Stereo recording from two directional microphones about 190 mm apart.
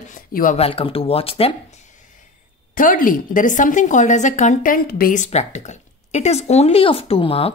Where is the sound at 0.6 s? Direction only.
30° left (ahead or behind).